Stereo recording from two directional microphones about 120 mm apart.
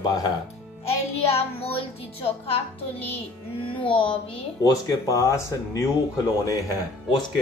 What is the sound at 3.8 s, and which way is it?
Music, 45° left (ahead or behind).